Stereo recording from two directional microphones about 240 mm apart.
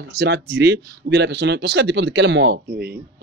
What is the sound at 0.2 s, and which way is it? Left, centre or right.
Speech, right.